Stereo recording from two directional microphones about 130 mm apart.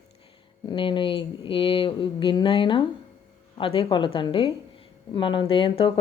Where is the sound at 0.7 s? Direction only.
40° left (ahead or behind).